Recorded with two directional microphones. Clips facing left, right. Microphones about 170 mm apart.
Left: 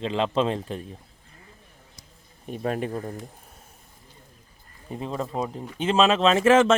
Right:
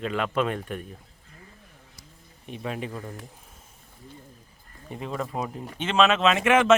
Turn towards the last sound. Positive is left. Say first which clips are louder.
# left 2 dB
turn(degrees=30)  # may be behind; listen again after turning